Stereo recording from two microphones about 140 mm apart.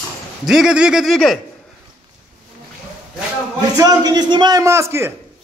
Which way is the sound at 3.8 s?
25° right (ahead or behind).